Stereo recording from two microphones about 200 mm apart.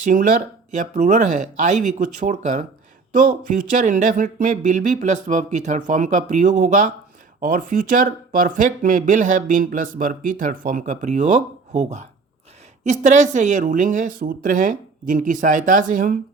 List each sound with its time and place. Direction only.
0.0 s speech: 40° right (ahead or behind)